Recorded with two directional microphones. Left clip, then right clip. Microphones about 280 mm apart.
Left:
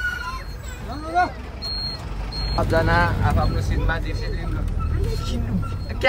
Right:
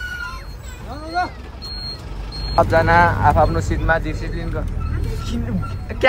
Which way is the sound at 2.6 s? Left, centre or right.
Centre.